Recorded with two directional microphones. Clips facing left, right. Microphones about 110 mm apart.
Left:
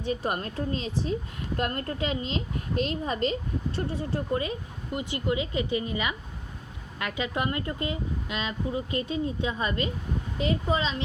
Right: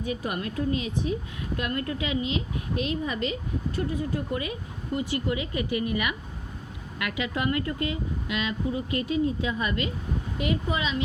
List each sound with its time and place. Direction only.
0.0 s speech: 30° left (ahead or behind)